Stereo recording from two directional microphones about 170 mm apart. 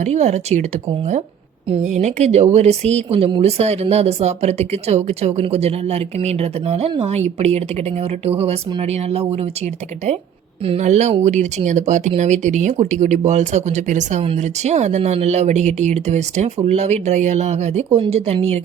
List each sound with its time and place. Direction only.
0.0 s speech: 40° right (ahead or behind)
1.7 s speech: 40° right (ahead or behind)
10.7 s speech: 40° right (ahead or behind)